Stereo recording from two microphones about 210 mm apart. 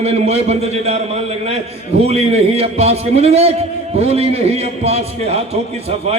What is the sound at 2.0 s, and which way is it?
A man's voice, 30° right (ahead or behind).